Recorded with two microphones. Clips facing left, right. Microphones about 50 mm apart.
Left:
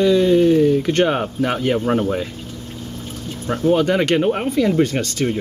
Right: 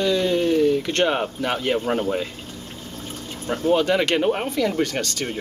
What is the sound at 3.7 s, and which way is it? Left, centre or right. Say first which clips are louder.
Speech: left 2 dB; centre.